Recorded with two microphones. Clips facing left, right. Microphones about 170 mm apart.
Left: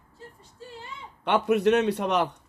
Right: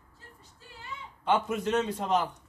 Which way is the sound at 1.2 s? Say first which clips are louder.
Left 6 dB; 70° left (ahead or behind).